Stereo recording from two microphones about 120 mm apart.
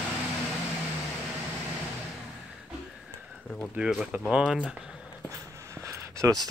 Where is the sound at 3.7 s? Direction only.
5° right (ahead or behind).